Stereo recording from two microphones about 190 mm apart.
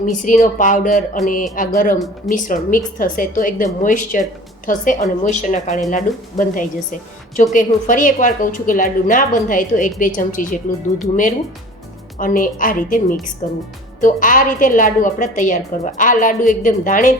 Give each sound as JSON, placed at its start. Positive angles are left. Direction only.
{"t": 0.0, "sound": "a woman's voice", "side_deg": 45}